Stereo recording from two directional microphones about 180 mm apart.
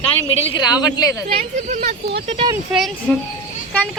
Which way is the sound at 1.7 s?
40° right (ahead or behind).